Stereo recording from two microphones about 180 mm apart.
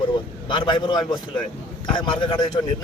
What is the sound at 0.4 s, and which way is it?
A man's voice, 25° left (ahead or behind).